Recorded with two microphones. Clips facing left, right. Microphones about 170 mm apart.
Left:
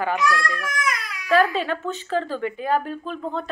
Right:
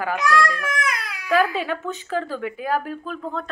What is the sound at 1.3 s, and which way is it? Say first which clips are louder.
A woman's voice: left 1 dB; 10° right (ahead or behind).